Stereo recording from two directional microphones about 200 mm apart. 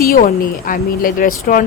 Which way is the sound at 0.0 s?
50° left (ahead or behind).